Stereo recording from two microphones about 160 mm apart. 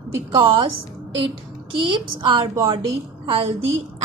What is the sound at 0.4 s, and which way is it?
Speech, 35° right (ahead or behind).